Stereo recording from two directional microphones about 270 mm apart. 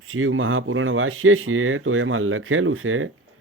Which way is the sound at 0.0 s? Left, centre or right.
Right.